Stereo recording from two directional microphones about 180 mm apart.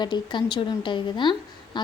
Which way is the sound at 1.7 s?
25° left (ahead or behind).